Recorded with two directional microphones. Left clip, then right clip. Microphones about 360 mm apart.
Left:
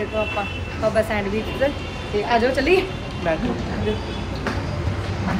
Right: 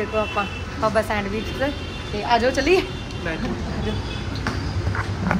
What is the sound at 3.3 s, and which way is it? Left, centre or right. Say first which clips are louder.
Speech: left 7 dB; centre.